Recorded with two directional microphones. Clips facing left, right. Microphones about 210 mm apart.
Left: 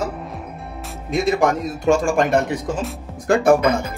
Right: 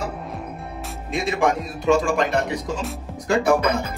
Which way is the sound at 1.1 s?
40° left (ahead or behind).